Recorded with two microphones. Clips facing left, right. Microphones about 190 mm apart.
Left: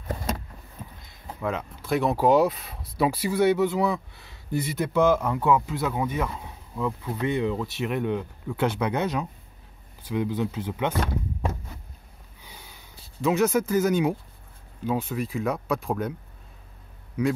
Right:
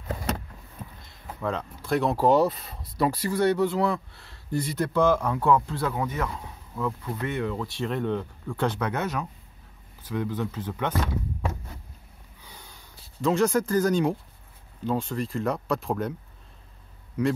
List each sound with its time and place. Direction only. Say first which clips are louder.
1.4 s speech: even; 5° left (ahead or behind)
12.4 s a sound: left 1 dB; 10° left (ahead or behind)
13.2 s speech: even; 5° left (ahead or behind)
17.2 s speech: even; centre (ahead or behind)